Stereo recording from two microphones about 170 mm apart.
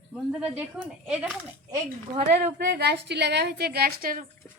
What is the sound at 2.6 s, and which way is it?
A woman's voice, 75° right (ahead or behind).